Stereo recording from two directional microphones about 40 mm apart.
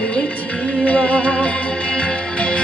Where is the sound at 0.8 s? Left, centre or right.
Left.